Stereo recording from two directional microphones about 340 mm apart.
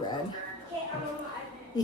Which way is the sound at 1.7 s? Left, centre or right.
Centre.